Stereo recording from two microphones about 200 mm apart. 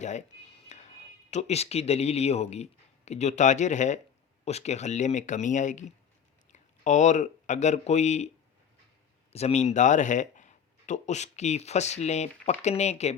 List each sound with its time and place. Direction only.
0.0 s speech: 35° left (ahead or behind)
9.3 s speech: 30° left (ahead or behind)